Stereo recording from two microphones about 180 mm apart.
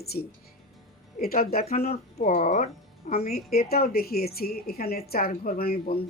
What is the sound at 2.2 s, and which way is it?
Speech, 40° left (ahead or behind).